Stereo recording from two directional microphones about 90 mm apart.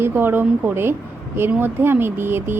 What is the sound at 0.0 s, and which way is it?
Speech, 25° right (ahead or behind).